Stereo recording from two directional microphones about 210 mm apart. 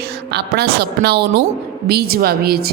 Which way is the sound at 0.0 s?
50° right (ahead or behind).